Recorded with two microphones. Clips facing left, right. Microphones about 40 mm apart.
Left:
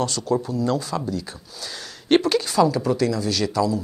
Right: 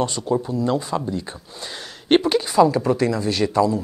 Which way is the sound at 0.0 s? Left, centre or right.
Right.